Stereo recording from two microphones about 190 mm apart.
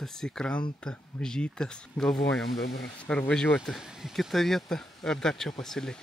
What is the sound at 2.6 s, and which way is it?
Speech, 60° left (ahead or behind).